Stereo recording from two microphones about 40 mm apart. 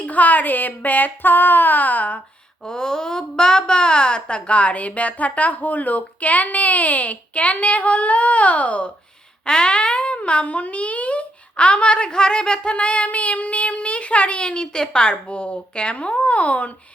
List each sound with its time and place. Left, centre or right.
0.0 s a sound: left
2.6 s a woman's voice: centre; by 8.9 s left
9.5 s a child's voice: left